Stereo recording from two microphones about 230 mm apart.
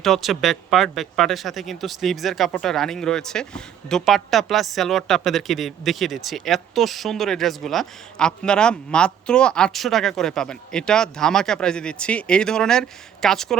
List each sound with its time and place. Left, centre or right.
0.0 s speech: centre